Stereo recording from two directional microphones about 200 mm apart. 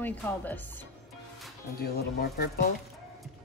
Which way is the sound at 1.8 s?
50° left (ahead or behind).